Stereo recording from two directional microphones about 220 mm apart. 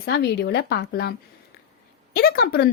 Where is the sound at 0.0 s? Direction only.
50° left (ahead or behind).